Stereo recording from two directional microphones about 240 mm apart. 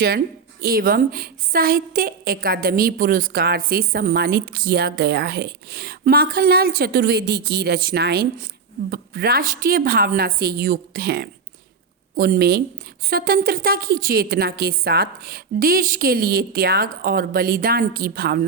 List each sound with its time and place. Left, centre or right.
0.6 s a woman's voice: right